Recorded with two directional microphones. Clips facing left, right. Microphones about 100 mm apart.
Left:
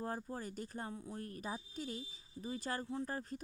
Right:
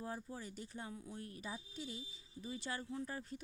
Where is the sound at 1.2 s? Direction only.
45° left (ahead or behind).